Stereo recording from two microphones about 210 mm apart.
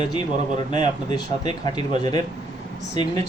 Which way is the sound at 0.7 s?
20° left (ahead or behind).